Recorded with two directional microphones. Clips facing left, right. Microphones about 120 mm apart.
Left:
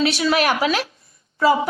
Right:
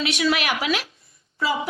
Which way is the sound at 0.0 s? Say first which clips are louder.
Left 4 dB; 35° left (ahead or behind).